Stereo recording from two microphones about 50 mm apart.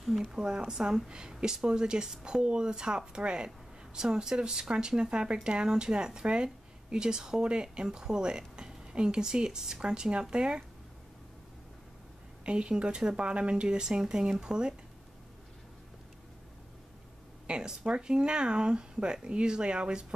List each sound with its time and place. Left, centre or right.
0.3 s speech: centre
12.4 s speech: centre
17.5 s speech: centre